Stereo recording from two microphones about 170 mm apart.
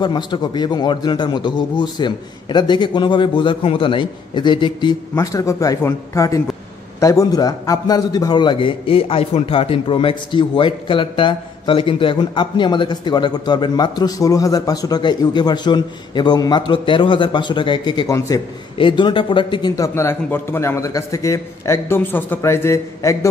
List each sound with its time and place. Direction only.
0.0 s a man's voice: 25° left (ahead or behind)
19.8 s a man's voice: 15° left (ahead or behind)